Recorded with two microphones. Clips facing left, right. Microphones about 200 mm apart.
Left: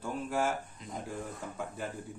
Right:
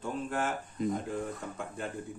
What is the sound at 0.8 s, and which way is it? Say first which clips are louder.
Speech: right 16 dB; 50° right (ahead or behind).